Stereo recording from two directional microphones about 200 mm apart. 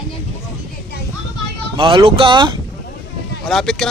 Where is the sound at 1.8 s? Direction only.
25° right (ahead or behind).